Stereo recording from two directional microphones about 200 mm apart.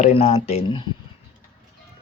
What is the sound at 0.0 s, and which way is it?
Speech, 30° left (ahead or behind).